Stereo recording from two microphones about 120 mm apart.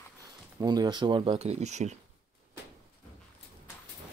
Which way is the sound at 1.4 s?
70° right (ahead or behind).